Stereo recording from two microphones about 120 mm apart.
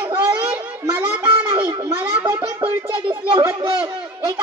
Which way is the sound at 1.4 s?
45° right (ahead or behind).